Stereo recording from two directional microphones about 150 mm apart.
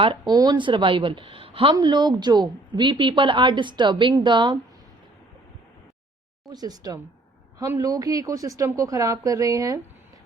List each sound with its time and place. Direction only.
0.0 s a woman's voice: 30° right (ahead or behind)
6.5 s a woman's voice: 25° right (ahead or behind)